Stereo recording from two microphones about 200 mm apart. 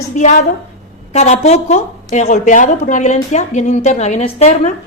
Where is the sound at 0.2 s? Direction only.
35° left (ahead or behind).